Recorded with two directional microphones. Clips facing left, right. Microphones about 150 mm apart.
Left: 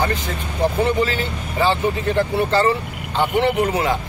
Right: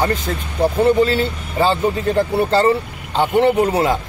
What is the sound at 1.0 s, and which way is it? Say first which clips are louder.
Speech: right 5 dB; 35° right (ahead or behind).